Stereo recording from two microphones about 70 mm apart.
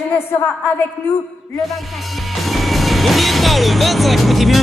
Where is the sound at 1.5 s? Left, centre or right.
Centre.